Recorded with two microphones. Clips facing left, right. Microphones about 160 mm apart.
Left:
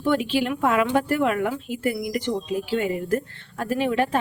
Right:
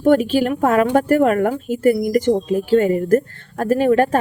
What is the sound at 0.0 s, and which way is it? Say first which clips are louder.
Speech: right 8 dB; 45° right (ahead or behind).